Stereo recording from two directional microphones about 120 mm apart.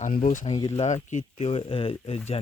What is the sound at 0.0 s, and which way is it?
Speech, 85° left.